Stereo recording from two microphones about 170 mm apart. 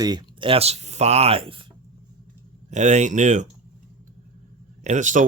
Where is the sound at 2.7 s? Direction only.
45° right (ahead or behind).